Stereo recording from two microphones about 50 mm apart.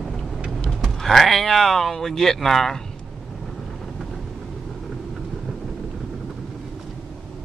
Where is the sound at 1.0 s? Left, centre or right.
Centre.